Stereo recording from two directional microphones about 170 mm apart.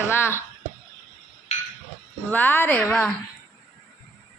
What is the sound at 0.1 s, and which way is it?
Speech, 15° left (ahead or behind).